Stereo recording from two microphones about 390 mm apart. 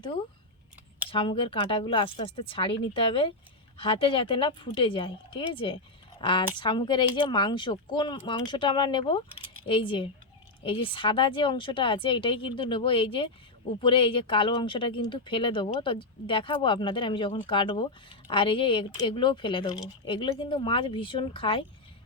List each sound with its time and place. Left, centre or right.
1.1 s speech: centre